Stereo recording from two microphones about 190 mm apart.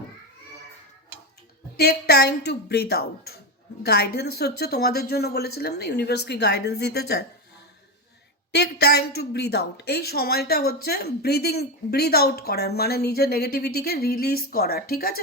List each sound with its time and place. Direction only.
1.7 s a woman's voice: 55° left (ahead or behind)
8.5 s a woman's voice: 60° left (ahead or behind)